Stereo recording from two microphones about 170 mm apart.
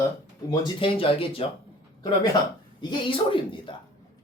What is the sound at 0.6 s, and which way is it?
Speech, 30° left (ahead or behind).